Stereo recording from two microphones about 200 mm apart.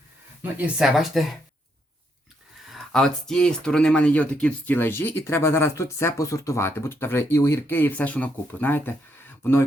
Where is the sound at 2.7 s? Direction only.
5° left (ahead or behind).